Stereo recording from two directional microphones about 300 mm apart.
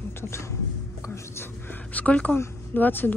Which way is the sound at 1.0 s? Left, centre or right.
Centre.